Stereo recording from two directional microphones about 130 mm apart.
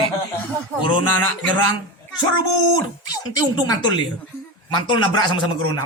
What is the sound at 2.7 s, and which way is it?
A man's voice, 30° left (ahead or behind).